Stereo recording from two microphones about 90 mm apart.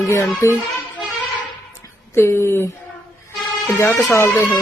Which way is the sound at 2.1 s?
30° left (ahead or behind).